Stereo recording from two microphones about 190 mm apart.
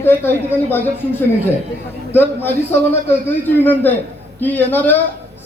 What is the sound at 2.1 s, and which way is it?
A man's voice, 10° left (ahead or behind).